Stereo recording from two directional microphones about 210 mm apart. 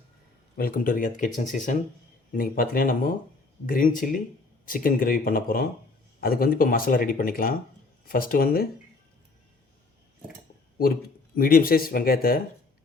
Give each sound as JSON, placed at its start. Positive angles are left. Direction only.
{"t": 0.5, "sound": "speech", "side_deg": 40}
{"t": 11.3, "sound": "speech", "side_deg": 45}